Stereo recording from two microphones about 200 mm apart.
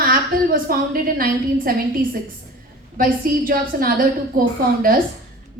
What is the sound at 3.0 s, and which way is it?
A woman's voice, 45° right (ahead or behind).